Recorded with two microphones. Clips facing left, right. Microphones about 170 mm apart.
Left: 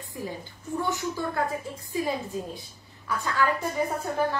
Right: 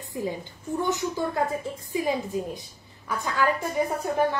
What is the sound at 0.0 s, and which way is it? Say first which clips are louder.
A woman's voice: right 5 dB; 20° right (ahead or behind).